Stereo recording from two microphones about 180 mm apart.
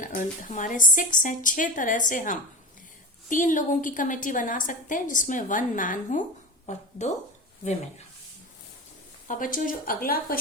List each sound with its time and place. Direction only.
0.0 s a woman's voice: 50° left (ahead or behind)
9.2 s a woman's voice: 45° left (ahead or behind)